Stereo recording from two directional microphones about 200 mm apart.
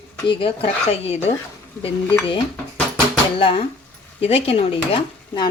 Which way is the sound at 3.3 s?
25° left (ahead or behind).